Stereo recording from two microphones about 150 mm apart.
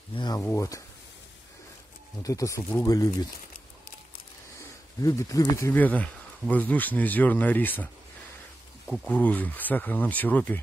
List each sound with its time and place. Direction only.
0.1 s a sound: 30° left (ahead or behind)
0.4 s speech: 15° left (ahead or behind)
2.2 s speech: 20° left (ahead or behind)
4.6 s speech: 20° left (ahead or behind)